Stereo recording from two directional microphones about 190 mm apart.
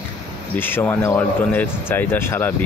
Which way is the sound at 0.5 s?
10° left (ahead or behind).